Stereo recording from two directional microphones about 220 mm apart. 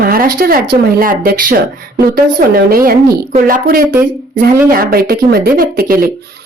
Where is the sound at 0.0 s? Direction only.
40° right (ahead or behind).